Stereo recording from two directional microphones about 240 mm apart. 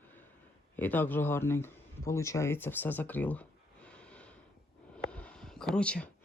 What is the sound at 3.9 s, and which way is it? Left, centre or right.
Snort, centre.